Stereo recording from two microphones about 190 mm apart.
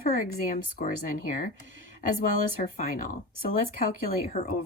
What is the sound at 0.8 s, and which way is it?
Speech, 45° left (ahead or behind).